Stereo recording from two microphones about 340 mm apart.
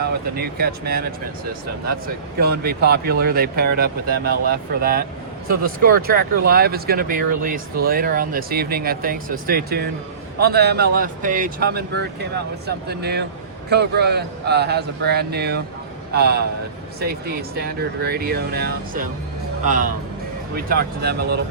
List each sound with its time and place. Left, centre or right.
0.3 s speech: right
2.4 s speech: right